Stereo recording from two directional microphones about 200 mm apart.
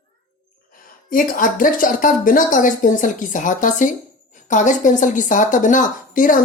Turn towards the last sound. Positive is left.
turn(degrees=40)  # may be behind; listen again after turning